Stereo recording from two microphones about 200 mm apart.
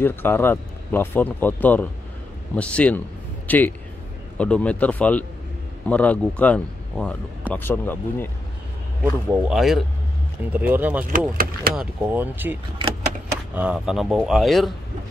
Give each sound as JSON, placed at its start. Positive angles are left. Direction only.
{"t": 0.0, "sound": "a man's voice", "side_deg": 10}
{"t": 9.0, "sound": "speech", "side_deg": -10}
{"t": 9.6, "sound": "a man's voice", "side_deg": 0}
{"t": 11.1, "sound": "speech", "side_deg": -45}
{"t": 11.7, "sound": "speech", "side_deg": -5}
{"t": 13.6, "sound": "a man's voice", "side_deg": -5}